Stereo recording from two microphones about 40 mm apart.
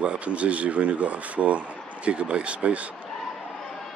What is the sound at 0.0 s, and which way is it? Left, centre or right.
Speech, right.